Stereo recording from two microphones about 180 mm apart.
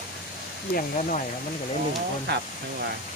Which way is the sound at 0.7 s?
45° left (ahead or behind).